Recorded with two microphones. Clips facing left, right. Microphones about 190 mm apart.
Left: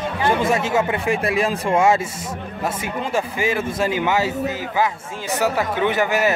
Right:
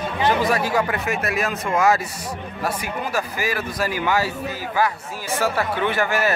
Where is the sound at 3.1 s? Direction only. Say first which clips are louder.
Left 5 dB; 25° left (ahead or behind).